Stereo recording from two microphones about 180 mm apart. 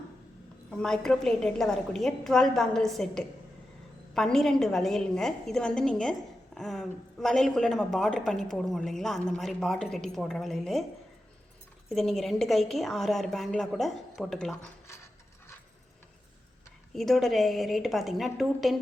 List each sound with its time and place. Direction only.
0.7 s a woman's voice: 5° left (ahead or behind)
11.9 s a woman's voice: centre (ahead or behind)
16.9 s a woman's voice: centre (ahead or behind)